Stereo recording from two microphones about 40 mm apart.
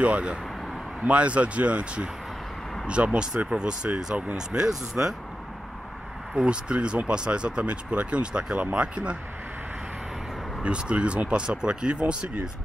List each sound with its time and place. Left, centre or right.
0.0 s speech: right
3.4 s speech: right
6.4 s speech: right
10.6 s speech: right